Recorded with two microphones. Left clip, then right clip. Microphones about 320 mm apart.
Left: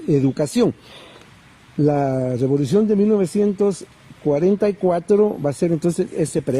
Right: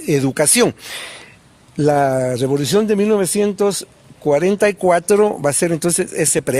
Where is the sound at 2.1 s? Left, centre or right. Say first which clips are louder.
Right 5 dB; right.